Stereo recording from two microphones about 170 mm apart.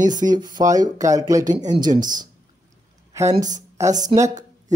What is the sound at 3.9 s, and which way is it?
Speech, 45° right (ahead or behind).